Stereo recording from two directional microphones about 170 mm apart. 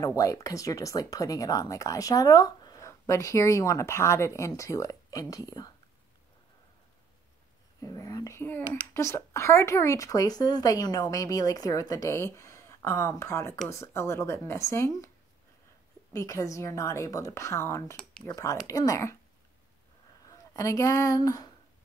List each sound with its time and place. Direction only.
0.0 s speech: 20° left (ahead or behind)
7.8 s speech: 20° left (ahead or behind)
16.1 s speech: 20° left (ahead or behind)
20.2 s speech: 20° left (ahead or behind)